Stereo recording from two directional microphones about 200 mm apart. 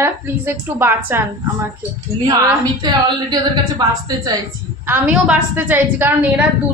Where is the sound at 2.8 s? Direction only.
20° right (ahead or behind).